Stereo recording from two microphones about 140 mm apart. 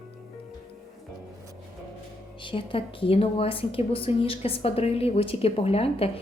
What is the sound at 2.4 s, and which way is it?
A woman's voice, 35° left (ahead or behind).